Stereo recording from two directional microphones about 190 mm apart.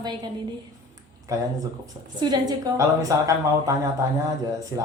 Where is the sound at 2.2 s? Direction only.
20° right (ahead or behind).